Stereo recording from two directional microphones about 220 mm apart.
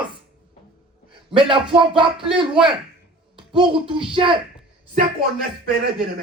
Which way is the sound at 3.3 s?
20° right (ahead or behind).